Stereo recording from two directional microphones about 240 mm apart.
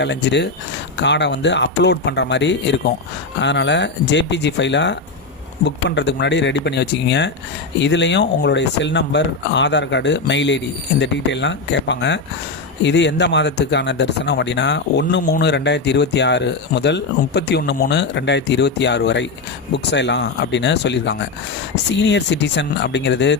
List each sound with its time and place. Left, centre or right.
0.0 s speech: left